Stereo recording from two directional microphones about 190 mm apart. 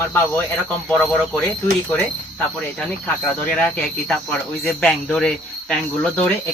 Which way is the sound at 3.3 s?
5° left (ahead or behind).